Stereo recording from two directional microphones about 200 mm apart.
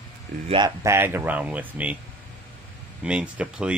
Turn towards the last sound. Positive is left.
turn(degrees=-5)  # may be behind; listen again after turning